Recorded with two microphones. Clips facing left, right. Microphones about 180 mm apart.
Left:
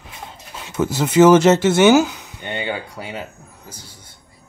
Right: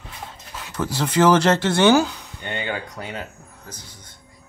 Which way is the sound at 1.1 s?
20° left (ahead or behind).